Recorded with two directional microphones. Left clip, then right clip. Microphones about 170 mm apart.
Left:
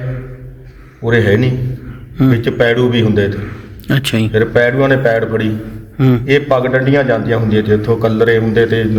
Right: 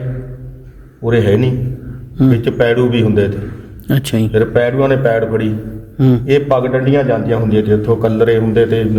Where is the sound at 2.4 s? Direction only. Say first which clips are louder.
Left 1 dB; 5° right (ahead or behind).